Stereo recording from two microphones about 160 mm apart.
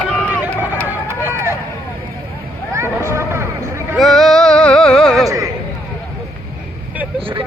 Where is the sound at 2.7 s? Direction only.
15° right (ahead or behind).